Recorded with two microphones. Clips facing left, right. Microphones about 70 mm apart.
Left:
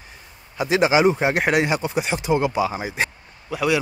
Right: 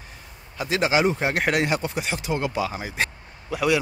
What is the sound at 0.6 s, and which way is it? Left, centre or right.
Speech, centre.